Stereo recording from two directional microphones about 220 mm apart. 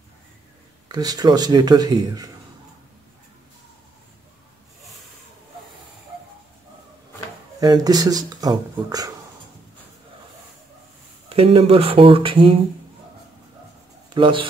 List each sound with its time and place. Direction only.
0.8 s speech: 15° right (ahead or behind)
7.6 s speech: 15° right (ahead or behind)
11.2 s speech: 25° right (ahead or behind)
14.1 s a man's voice: 20° right (ahead or behind)